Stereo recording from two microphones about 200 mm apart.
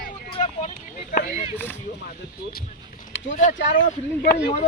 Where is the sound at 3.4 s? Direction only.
40° left (ahead or behind).